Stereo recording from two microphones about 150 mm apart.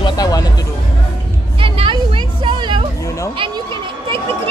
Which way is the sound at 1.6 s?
35° right (ahead or behind).